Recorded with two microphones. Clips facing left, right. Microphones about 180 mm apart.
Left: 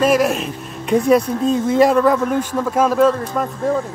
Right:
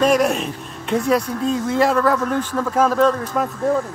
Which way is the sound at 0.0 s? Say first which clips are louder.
Left 1 dB; 5° left (ahead or behind).